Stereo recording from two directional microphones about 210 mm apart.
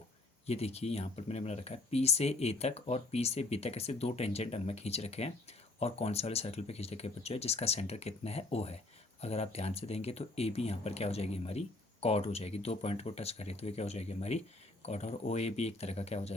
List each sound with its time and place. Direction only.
0.4 s speech: 30° left (ahead or behind)